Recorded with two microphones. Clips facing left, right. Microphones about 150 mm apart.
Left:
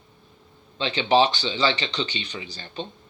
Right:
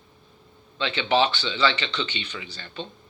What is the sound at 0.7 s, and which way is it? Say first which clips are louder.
Speech: left 3 dB; 35° left (ahead or behind).